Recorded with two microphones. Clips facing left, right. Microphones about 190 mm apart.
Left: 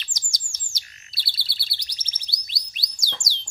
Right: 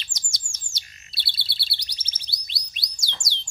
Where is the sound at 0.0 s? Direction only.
25° right (ahead or behind).